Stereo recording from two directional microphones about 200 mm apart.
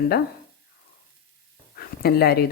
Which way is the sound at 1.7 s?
50° left (ahead or behind).